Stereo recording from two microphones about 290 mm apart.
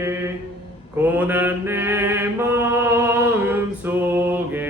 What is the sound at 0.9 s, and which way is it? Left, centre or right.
Mantra, centre.